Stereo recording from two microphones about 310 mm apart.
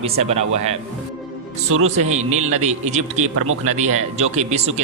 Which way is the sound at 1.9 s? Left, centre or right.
Right.